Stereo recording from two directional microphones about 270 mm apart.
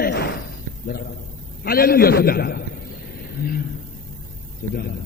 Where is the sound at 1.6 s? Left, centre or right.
Left.